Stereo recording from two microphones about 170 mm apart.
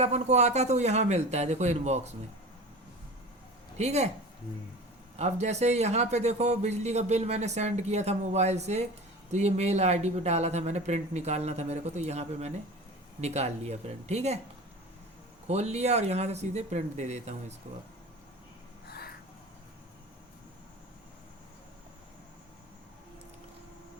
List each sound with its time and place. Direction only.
0.0 s speech: 40° right (ahead or behind)
3.8 s speech: 40° right (ahead or behind)
5.1 s speech: 40° right (ahead or behind)
15.4 s speech: 40° right (ahead or behind)
18.9 s a sound: 65° left (ahead or behind)